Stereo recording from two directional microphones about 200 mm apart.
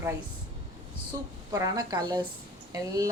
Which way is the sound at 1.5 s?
20° right (ahead or behind).